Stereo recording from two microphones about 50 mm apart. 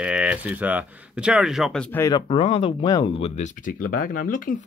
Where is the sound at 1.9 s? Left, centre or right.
Left.